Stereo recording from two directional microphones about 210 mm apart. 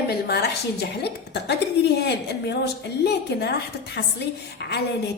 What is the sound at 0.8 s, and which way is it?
Speech, 50° left (ahead or behind).